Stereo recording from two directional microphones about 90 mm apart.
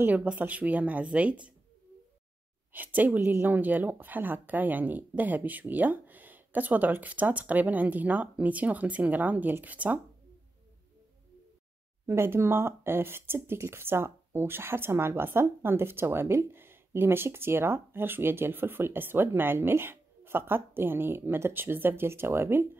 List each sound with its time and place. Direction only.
0.0 s a woman's voice: 15° right (ahead or behind)
2.7 s speech: 20° right (ahead or behind)
12.1 s speech: 30° right (ahead or behind)